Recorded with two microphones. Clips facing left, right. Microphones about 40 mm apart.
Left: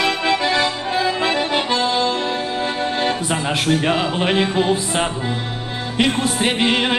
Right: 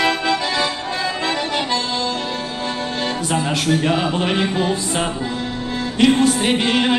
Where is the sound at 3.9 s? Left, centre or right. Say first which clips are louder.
Even; centre.